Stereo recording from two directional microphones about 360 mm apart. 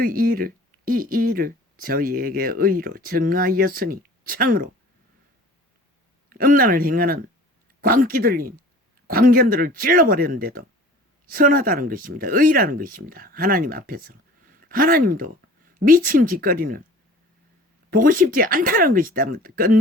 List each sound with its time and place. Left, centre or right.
0.0 s speech: right
6.3 s speech: right
17.9 s speech: right